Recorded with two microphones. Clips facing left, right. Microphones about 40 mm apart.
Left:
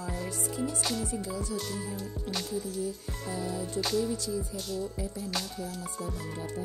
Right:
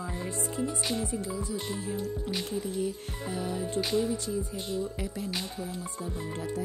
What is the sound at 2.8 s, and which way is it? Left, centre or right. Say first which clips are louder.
Music: right 2 dB; right.